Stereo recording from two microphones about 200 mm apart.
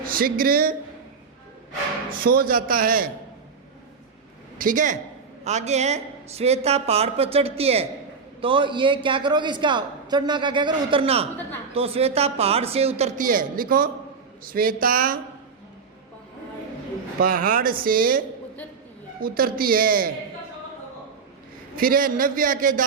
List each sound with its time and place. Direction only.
0.0 s speech: 45° right (ahead or behind)
2.2 s a man's voice: 45° right (ahead or behind)
4.5 s a woman's voice: 40° right (ahead or behind)
17.2 s a man's voice: 45° right (ahead or behind)
19.2 s a man's voice: 45° right (ahead or behind)
21.8 s a man's voice: 45° right (ahead or behind)